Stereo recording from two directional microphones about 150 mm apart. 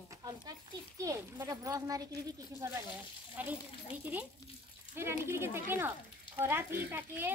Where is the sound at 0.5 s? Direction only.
25° right (ahead or behind).